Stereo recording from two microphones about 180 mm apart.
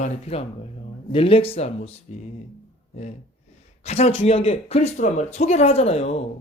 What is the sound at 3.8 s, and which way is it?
Speech, 35° left (ahead or behind).